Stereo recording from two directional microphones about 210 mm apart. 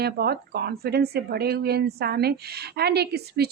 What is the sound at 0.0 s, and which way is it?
Speech, 50° right (ahead or behind).